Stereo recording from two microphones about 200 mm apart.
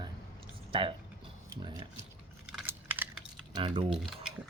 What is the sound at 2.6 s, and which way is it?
Computer keyboard, 10° right (ahead or behind).